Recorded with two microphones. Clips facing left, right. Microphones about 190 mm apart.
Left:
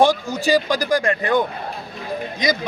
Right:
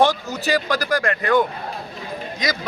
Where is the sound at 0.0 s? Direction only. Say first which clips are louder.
Left 2 dB; 10° left (ahead or behind).